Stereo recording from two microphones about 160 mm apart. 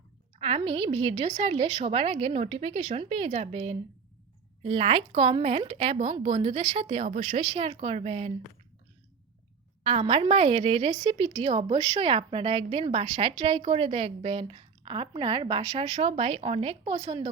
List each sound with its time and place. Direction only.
0.3 s a woman's voice: 40° right (ahead or behind)
9.8 s a woman's voice: 40° right (ahead or behind)